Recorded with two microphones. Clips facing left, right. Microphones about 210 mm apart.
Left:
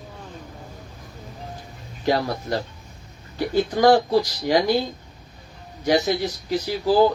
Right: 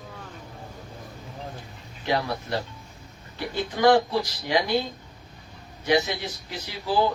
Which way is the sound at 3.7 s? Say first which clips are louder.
Left 2 dB; 40° left (ahead or behind).